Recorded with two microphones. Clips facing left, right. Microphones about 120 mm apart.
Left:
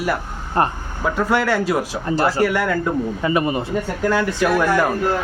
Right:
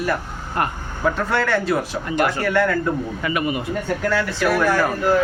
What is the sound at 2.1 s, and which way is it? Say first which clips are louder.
Speech: left 2 dB; 35° left (ahead or behind).